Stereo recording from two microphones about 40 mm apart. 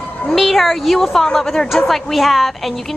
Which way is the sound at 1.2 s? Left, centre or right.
Centre.